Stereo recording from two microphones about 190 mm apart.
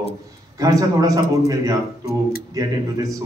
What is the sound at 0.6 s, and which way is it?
A man's voice, 15° right (ahead or behind).